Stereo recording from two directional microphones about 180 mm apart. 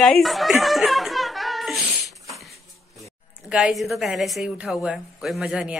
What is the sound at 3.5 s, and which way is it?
A woman's voice, centre (ahead or behind).